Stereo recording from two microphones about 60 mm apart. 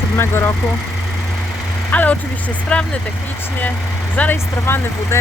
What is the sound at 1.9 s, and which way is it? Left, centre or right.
Speech, left.